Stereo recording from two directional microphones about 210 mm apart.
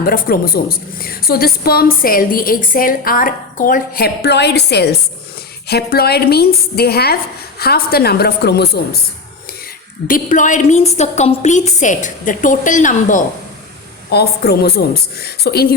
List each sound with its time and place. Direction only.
0.0 s a woman's voice: 45° left (ahead or behind)
10.1 s a woman's voice: 40° left (ahead or behind)
14.1 s a woman's voice: 50° left (ahead or behind)